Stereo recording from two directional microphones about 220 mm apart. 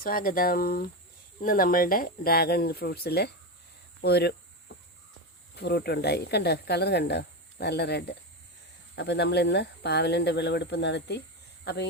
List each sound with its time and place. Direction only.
0.0 s speech: 40° left (ahead or behind)
5.5 s speech: 50° left (ahead or behind)